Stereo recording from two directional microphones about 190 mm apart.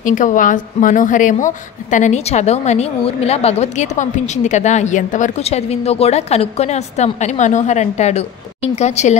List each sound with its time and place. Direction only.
0.0 s a woman's voice: 40° left (ahead or behind)